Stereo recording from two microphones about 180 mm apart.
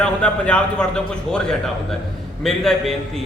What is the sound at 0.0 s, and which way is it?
A man's voice, 5° left (ahead or behind).